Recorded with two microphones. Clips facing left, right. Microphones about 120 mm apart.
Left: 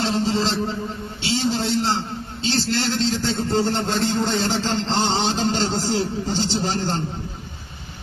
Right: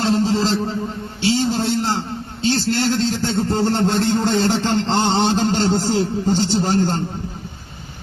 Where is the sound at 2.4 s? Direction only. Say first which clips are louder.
Right 4 dB; 50° right (ahead or behind).